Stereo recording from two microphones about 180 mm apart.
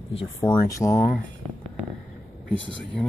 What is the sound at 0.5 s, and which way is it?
Speech, 15° left (ahead or behind).